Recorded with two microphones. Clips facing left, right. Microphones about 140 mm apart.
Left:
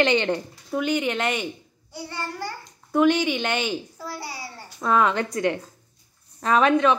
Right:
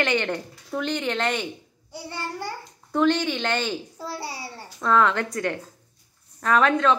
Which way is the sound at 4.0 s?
30° right (ahead or behind).